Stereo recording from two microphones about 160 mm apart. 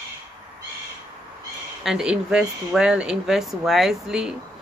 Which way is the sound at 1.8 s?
5° right (ahead or behind).